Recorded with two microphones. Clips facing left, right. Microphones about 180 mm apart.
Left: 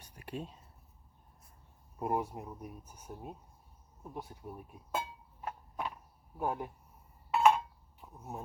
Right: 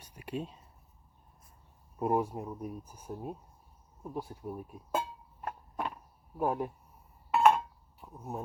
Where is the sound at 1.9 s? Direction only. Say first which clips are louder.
Right 4 dB; 30° right (ahead or behind).